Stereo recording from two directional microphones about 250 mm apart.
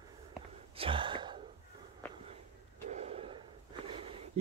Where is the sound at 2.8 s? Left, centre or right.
Right.